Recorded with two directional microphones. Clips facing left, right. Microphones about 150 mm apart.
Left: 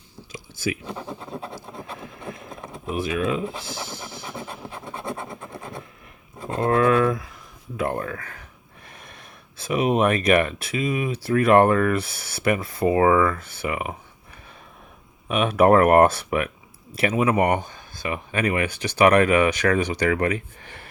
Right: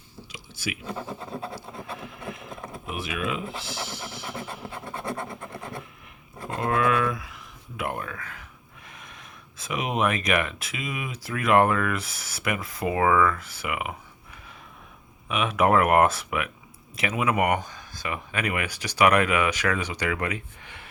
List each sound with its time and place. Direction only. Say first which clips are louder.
0.9 s speech: left 1 dB; centre (ahead or behind)
3.1 s speech: left 5 dB; 35° left (ahead or behind)
3.6 s speech: left 1 dB; 50° left (ahead or behind)
5.3 s speech: left 1 dB; centre (ahead or behind)
6.6 s a sound: left 5 dB; 35° left (ahead or behind)
7.8 s speech: left 5 dB; 35° left (ahead or behind)
9.6 s speech: left 6 dB; 35° left (ahead or behind)
15.3 s speech: left 5 dB; 35° left (ahead or behind)